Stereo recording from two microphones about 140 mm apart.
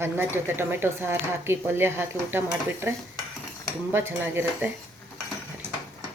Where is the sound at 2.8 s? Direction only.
20° right (ahead or behind).